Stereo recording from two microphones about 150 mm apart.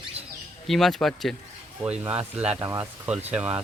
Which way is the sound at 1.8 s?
10° right (ahead or behind).